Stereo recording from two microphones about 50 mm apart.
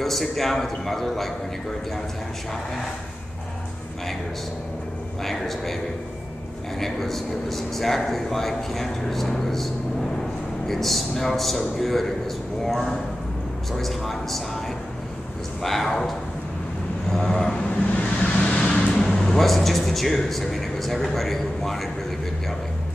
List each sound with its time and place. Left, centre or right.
0.0 s a man's voice: centre
5.2 s a man's voice: centre
6.8 s a man's voice: centre
10.7 s a man's voice: centre
15.6 s a man's voice: centre
17.1 s vehicle: centre
18.0 s vehicle: left; by 21.8 s centre